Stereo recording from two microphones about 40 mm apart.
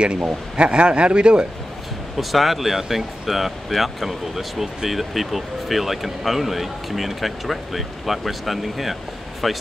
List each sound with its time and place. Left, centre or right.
0.2 s speech: right
2.1 s speech: centre